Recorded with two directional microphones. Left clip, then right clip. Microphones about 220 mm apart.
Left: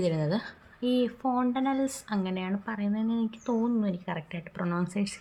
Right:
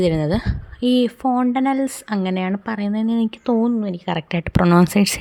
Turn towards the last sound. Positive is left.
turn(degrees=-50)  # may be behind; listen again after turning